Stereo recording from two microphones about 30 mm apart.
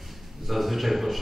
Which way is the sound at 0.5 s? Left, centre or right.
Centre.